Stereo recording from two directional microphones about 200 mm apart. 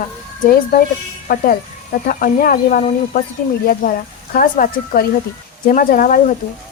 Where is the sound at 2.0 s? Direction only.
45° left (ahead or behind).